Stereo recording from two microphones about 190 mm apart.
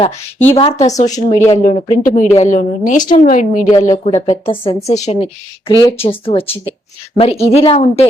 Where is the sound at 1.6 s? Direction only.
40° left (ahead or behind).